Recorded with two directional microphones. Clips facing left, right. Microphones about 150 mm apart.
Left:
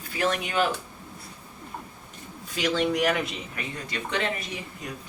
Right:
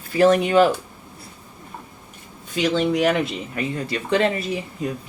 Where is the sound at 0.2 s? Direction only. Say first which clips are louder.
Right 11 dB; 35° right (ahead or behind).